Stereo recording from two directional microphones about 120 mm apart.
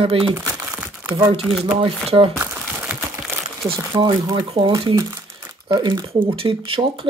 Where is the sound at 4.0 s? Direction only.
35° right (ahead or behind).